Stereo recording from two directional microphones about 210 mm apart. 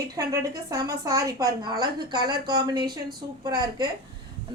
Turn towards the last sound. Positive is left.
turn(degrees=-20)  # may be behind; listen again after turning